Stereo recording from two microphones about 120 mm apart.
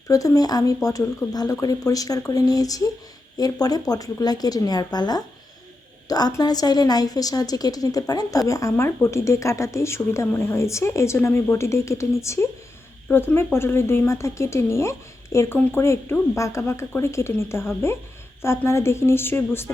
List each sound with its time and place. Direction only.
0.1 s a woman's voice: 30° left (ahead or behind)